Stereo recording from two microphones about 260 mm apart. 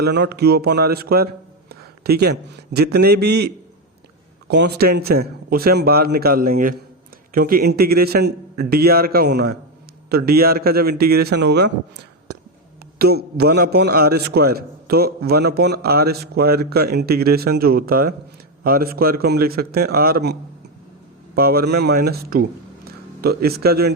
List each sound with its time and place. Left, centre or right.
0.0 s a man's voice: right
21.3 s speech: right